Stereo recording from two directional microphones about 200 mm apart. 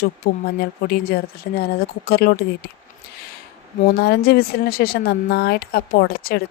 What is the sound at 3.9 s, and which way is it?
Speech, 50° left (ahead or behind).